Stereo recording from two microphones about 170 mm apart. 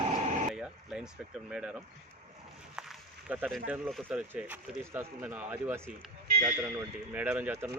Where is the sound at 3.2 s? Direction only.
10° right (ahead or behind).